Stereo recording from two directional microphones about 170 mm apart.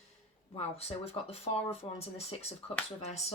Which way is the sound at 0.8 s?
35° left (ahead or behind).